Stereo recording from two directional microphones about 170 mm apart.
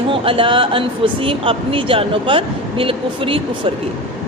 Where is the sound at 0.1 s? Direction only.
30° right (ahead or behind).